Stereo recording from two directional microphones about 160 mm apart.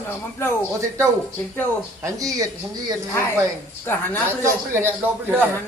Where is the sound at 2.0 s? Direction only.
20° right (ahead or behind).